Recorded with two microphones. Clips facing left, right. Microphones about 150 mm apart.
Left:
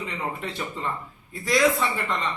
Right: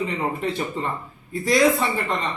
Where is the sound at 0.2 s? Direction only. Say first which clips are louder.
Right 6 dB; 45° right (ahead or behind).